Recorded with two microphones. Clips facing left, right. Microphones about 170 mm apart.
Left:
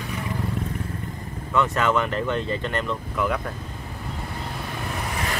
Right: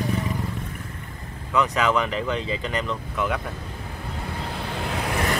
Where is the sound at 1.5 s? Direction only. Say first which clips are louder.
Even; centre (ahead or behind).